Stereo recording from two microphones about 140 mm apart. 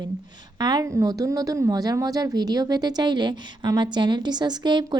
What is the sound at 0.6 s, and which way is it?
Speech, 30° right (ahead or behind).